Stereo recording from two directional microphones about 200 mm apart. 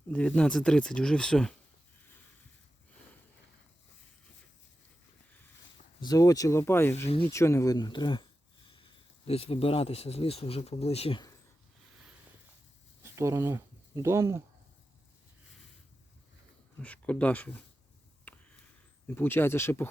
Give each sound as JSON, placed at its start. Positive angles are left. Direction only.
{"t": 0.1, "sound": "speech", "side_deg": 5}
{"t": 6.0, "sound": "speech", "side_deg": 20}
{"t": 13.0, "sound": "speech", "side_deg": -15}
{"t": 16.8, "sound": "speech", "side_deg": 5}
{"t": 18.3, "sound": "a sound", "side_deg": 10}
{"t": 19.0, "sound": "speech", "side_deg": 10}